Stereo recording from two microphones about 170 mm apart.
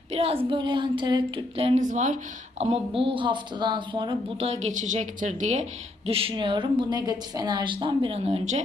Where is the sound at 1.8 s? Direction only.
45° right (ahead or behind).